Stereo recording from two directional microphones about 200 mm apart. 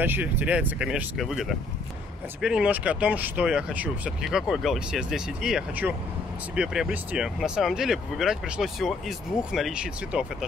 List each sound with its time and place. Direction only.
0.0 s speech: 10° right (ahead or behind)